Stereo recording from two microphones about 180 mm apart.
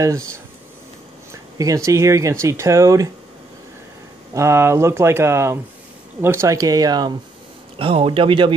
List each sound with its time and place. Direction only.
1.3 s speech: 20° right (ahead or behind)
4.3 s speech: 15° right (ahead or behind)